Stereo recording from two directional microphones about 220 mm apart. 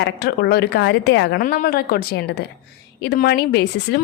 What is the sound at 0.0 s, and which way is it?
A woman's voice, 45° left (ahead or behind).